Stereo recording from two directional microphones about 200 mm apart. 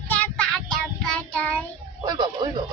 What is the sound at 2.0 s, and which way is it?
Speech, 20° right (ahead or behind).